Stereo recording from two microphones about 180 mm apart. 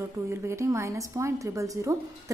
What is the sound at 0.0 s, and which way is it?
A woman's voice, 15° right (ahead or behind).